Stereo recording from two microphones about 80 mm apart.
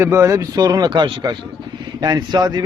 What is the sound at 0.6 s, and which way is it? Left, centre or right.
A man's voice, right.